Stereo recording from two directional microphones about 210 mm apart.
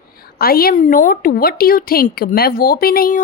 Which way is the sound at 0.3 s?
45° left (ahead or behind).